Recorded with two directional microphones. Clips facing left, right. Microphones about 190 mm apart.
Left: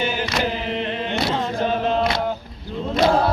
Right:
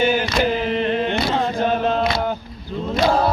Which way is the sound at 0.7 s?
45° right (ahead or behind).